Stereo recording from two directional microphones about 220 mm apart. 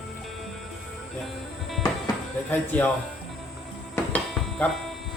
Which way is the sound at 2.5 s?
10° left (ahead or behind).